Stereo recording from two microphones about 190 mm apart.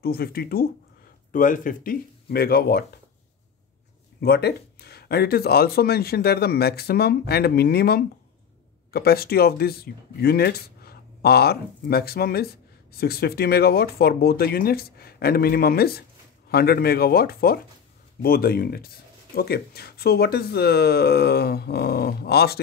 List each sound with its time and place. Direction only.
0.0 s speech: 50° left (ahead or behind)
4.2 s speech: 60° left (ahead or behind)